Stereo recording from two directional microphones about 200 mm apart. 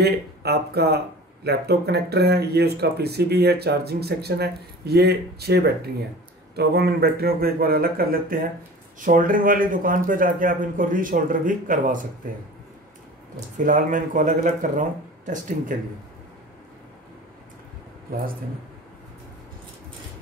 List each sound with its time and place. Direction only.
0.0 s speech: 55° right (ahead or behind)
13.6 s speech: 40° right (ahead or behind)